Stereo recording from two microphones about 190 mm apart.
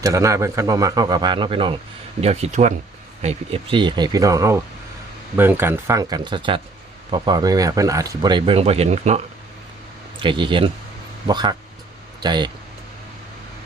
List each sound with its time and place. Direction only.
0.0 s speech: 15° right (ahead or behind)